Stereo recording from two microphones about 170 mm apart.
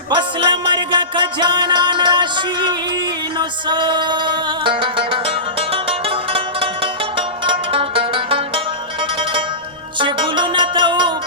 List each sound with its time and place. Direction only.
0.1 s music: 30° right (ahead or behind)